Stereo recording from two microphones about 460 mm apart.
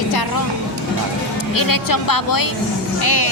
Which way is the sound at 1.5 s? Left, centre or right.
Left.